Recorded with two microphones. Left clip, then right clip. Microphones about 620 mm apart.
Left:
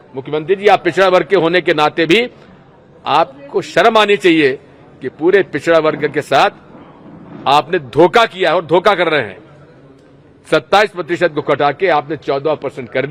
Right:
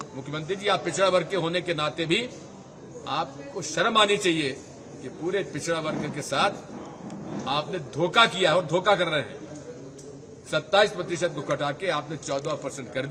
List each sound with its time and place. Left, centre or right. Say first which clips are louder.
0.3 s a man's voice: left 15 dB; left
5.3 s a man's voice: left 17 dB; left
10.5 s a man's voice: left 10 dB; left